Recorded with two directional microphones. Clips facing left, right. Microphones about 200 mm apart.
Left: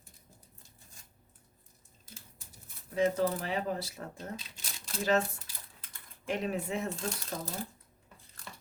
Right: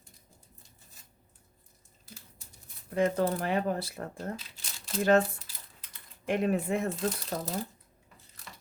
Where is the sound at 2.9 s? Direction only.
55° right (ahead or behind).